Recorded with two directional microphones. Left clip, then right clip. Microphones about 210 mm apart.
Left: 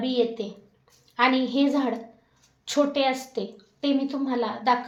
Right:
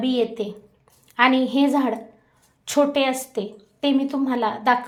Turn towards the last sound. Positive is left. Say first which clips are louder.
# right 4 dB
turn(degrees=-30)  # may be behind; listen again after turning